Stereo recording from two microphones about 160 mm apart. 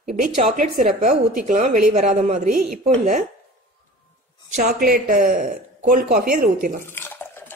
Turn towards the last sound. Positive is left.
turn(degrees=15)  # may be behind; listen again after turning